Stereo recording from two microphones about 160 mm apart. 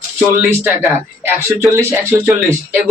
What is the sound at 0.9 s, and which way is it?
Speech, 15° right (ahead or behind).